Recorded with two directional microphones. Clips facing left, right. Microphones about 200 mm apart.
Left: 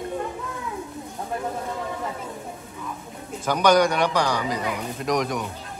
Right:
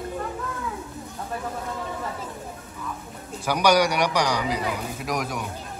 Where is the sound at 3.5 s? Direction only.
10° right (ahead or behind).